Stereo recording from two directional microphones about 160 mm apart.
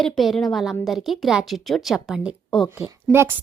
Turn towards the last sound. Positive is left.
turn(degrees=-15)  # may be behind; listen again after turning